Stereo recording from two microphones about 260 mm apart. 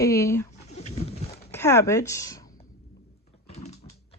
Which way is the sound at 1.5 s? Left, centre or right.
Centre.